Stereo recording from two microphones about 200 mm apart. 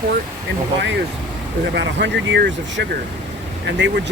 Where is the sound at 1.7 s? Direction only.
60° right (ahead or behind).